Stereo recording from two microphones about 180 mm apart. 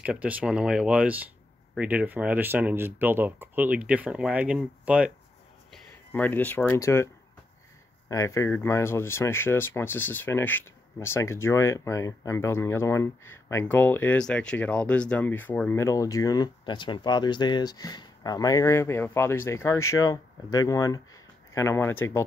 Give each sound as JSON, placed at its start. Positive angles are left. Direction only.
{"t": 0.0, "sound": "speech", "side_deg": -5}
{"t": 5.7, "sound": "speech", "side_deg": 10}
{"t": 8.1, "sound": "speech", "side_deg": 15}